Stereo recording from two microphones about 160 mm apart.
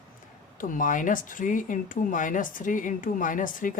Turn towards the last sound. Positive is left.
turn(degrees=55)  # may be behind; listen again after turning